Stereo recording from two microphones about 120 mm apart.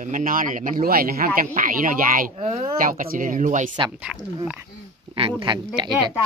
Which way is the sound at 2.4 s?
65° right (ahead or behind).